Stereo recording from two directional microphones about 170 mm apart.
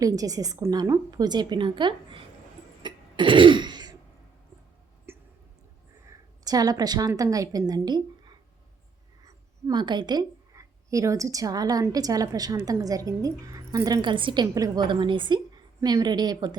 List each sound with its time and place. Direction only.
0.0 s a woman's voice: 20° right (ahead or behind)
2.8 s throat clearing: 30° right (ahead or behind)
5.1 s a sound: 15° right (ahead or behind)
6.1 s a woman's voice: 20° right (ahead or behind)